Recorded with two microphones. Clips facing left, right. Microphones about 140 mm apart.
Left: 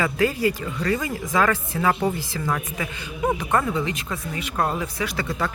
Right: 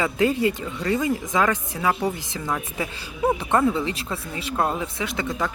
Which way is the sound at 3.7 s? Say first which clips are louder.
Even; 30° right (ahead or behind).